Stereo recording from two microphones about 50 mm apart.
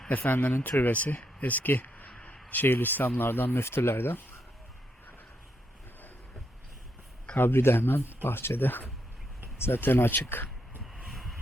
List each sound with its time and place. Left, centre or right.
0.1 s speech: left
2.0 s a sound: left
2.5 s speech: left
7.3 s speech: left
11.1 s vehicle: centre